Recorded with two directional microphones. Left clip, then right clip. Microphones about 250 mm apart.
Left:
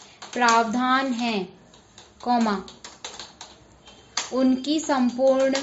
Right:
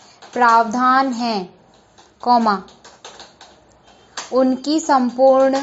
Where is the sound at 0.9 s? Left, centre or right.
Centre.